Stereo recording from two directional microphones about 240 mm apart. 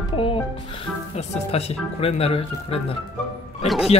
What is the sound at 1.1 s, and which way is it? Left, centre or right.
Speech, left.